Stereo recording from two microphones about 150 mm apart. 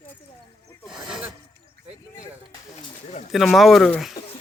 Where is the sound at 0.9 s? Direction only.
5° right (ahead or behind).